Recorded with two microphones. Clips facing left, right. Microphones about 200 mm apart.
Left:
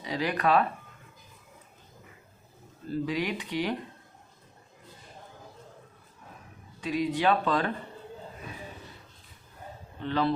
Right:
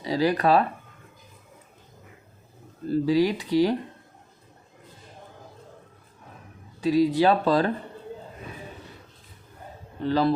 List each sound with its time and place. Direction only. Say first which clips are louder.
0.0 s speech: right 6 dB; 35° right (ahead or behind)
2.8 s speech: right 9 dB; 35° right (ahead or behind)
6.8 s speech: right 7 dB; 35° right (ahead or behind)
10.0 s speech: right 5 dB; 35° right (ahead or behind)